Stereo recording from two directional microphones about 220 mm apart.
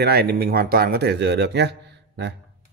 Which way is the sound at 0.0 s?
45° right (ahead or behind).